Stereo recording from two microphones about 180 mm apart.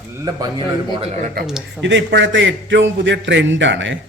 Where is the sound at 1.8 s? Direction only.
75° right (ahead or behind).